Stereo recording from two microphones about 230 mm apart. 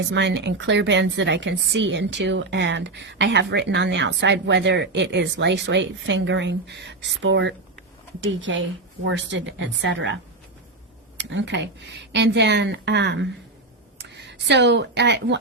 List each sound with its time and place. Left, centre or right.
0.0 s a woman's voice: right
11.2 s a woman's voice: right